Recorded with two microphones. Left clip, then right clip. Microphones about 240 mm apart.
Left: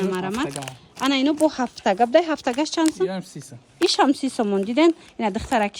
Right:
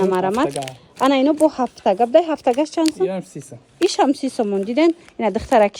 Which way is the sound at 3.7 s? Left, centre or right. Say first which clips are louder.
Right 2 dB; centre.